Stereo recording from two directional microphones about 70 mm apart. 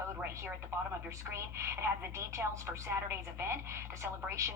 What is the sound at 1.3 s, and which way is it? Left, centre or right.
Speech, right.